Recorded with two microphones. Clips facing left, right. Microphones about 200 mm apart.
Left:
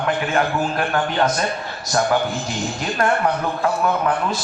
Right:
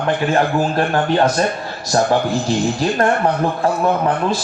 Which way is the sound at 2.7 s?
35° right (ahead or behind).